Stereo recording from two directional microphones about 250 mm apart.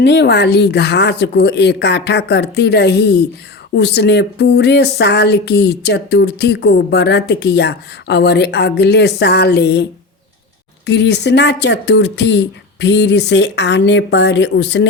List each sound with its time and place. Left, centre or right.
0.0 s a woman's voice: left
10.8 s a woman's voice: left